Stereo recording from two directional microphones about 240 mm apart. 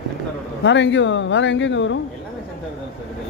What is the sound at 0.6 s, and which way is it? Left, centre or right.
Speech, left.